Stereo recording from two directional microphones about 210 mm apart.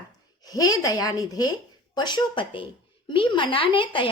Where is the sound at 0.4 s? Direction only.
15° left (ahead or behind).